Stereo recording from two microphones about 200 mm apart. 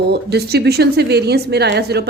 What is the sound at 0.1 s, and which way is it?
A woman's voice, 55° right (ahead or behind).